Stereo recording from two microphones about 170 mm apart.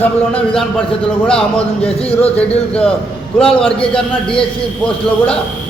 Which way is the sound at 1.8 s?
35° left (ahead or behind).